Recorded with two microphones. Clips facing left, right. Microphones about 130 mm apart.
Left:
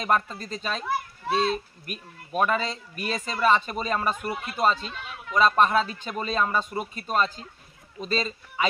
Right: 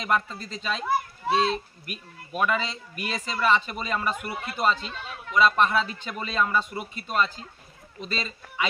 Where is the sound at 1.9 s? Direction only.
40° left (ahead or behind).